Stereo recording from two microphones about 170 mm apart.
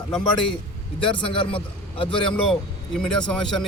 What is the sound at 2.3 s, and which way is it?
Speech, 5° left (ahead or behind).